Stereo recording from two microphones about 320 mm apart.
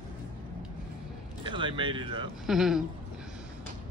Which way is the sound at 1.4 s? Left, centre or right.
Centre.